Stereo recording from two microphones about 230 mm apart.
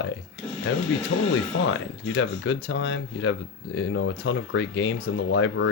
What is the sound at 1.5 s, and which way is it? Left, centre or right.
Speech, left.